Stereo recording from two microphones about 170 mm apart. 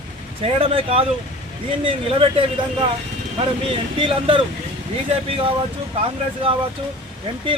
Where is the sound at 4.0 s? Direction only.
30° right (ahead or behind).